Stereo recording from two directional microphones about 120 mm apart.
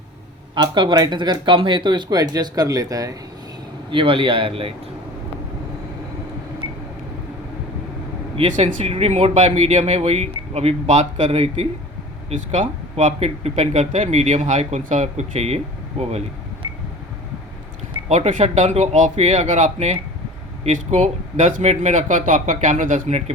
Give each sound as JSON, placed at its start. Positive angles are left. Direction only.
{"t": 0.5, "sound": "speech", "side_deg": -40}
{"t": 3.9, "sound": "speech", "side_deg": -45}
{"t": 8.5, "sound": "speech", "side_deg": -60}
{"t": 12.3, "sound": "speech", "side_deg": -80}
{"t": 18.1, "sound": "speech", "side_deg": -65}